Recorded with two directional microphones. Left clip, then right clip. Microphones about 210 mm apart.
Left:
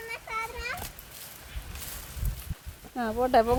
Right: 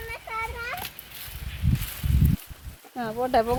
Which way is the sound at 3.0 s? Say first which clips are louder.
Even; centre (ahead or behind).